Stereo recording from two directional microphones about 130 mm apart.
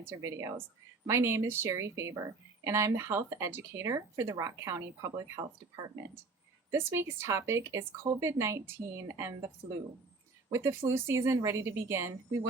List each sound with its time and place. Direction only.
0.0 s speech: 20° right (ahead or behind)
10.5 s speech: 20° right (ahead or behind)